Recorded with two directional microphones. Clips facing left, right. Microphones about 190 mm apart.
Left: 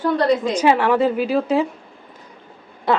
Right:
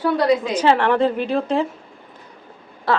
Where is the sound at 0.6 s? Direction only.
5° left (ahead or behind).